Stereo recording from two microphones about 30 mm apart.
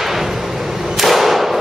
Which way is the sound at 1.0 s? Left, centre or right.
Centre.